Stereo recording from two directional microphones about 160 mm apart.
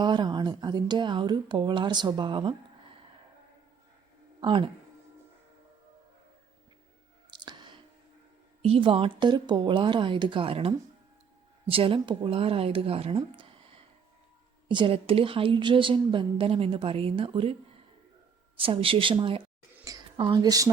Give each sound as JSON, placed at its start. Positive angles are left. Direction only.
{"t": 0.0, "sound": "a woman's voice", "side_deg": -30}
{"t": 4.4, "sound": "speech", "side_deg": -30}
{"t": 7.3, "sound": "a sound", "side_deg": -30}
{"t": 8.6, "sound": "a woman's voice", "side_deg": -35}